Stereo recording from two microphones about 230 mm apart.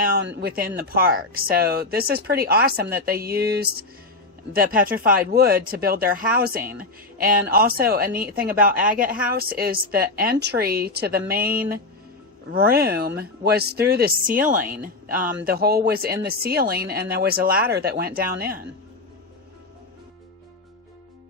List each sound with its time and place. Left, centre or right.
0.0 s speech: right
8.7 s speech: centre
9.2 s speech: right